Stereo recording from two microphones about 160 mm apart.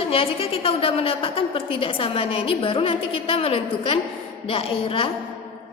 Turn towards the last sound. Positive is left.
turn(degrees=35)  # may be behind; listen again after turning